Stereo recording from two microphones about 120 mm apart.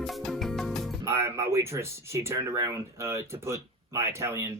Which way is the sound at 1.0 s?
20° right (ahead or behind).